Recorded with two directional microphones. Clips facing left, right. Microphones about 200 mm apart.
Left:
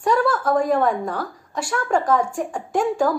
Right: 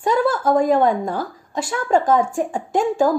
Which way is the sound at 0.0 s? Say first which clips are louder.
Right 1 dB; 25° right (ahead or behind).